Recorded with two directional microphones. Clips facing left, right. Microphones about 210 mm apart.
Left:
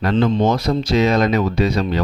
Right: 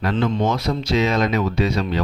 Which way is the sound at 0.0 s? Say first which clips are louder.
Left 4 dB; 40° left (ahead or behind).